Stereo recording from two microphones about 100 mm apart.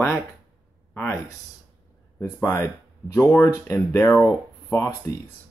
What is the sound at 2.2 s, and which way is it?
Speech, 25° left (ahead or behind).